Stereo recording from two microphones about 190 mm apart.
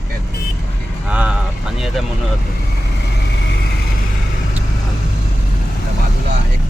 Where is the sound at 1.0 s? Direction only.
5° right (ahead or behind).